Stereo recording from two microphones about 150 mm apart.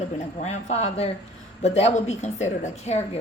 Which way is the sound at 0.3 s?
50° left (ahead or behind).